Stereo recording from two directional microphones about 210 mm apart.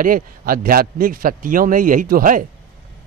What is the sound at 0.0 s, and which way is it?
A man's voice, 40° right (ahead or behind).